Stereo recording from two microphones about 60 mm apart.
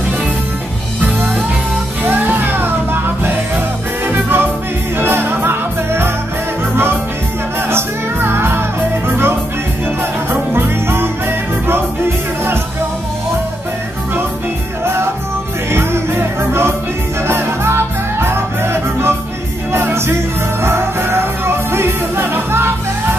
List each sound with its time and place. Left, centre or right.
2.0 s music: right
7.7 s music: right
10.3 s music: right
15.7 s music: right